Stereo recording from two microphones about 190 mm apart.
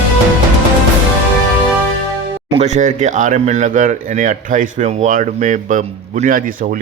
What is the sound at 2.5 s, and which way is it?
Speech, 35° right (ahead or behind).